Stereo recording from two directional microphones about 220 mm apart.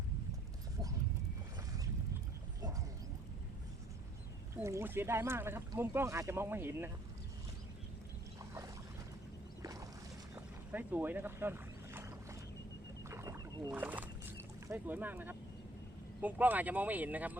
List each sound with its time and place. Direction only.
4.5 s speech: 10° right (ahead or behind)
8.4 s boat: 15° right (ahead or behind)
13.1 s rowboat: 15° right (ahead or behind)
16.2 s speech: 5° right (ahead or behind)